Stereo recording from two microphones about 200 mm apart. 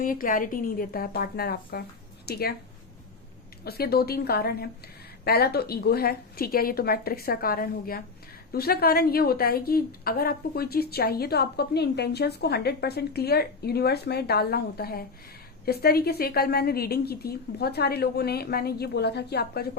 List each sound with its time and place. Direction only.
0.0 s a woman's voice: 45° left (ahead or behind)
3.6 s a woman's voice: 50° left (ahead or behind)